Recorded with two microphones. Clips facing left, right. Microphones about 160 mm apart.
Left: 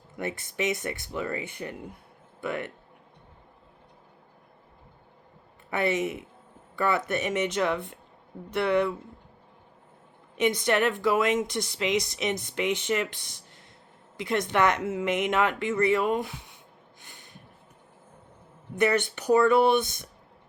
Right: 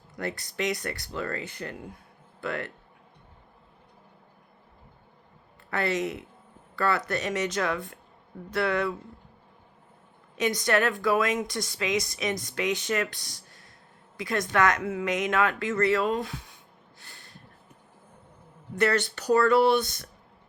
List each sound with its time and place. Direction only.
0.2 s speech: 20° left (ahead or behind)
5.7 s speech: 20° left (ahead or behind)
10.6 s speech: 20° left (ahead or behind)
14.2 s speech: 25° left (ahead or behind)
17.0 s a sound: 15° left (ahead or behind)
18.8 s speech: 15° left (ahead or behind)